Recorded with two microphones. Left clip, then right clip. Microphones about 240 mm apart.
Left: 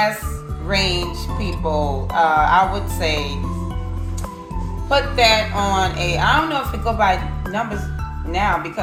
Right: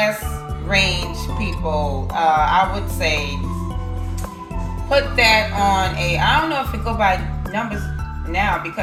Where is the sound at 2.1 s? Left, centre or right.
Left.